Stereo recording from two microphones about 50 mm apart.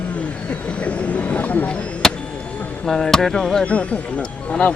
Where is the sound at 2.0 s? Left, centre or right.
Centre.